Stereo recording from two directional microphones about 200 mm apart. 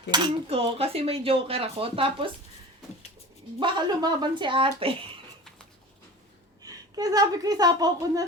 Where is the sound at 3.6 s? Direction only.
20° right (ahead or behind).